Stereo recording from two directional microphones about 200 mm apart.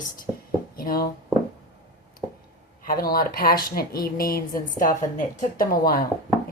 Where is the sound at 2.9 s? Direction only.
50° left (ahead or behind).